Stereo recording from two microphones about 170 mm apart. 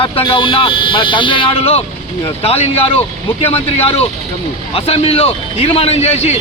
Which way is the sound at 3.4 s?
35° left (ahead or behind).